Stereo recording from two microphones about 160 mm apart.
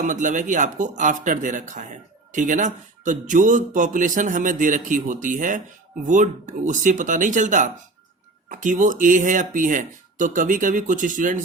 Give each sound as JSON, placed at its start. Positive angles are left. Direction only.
{"t": 0.0, "sound": "speech", "side_deg": -55}